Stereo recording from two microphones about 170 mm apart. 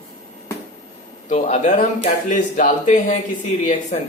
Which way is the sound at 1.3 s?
40° left (ahead or behind).